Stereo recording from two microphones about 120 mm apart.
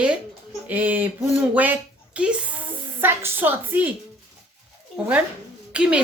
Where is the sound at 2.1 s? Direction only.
10° right (ahead or behind).